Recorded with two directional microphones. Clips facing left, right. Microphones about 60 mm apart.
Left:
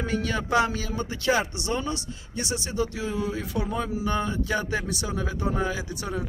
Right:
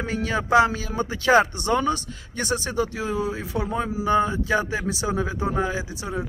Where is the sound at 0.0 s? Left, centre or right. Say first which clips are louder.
Right 2 dB; right.